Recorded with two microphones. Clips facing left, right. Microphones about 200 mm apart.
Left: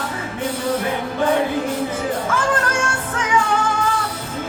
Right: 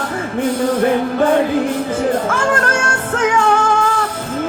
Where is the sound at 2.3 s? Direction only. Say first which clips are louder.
Right 4 dB; 45° right (ahead or behind).